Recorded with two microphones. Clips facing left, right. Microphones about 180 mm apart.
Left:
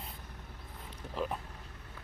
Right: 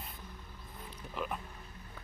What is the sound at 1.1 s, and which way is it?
Speech, 30° left (ahead or behind).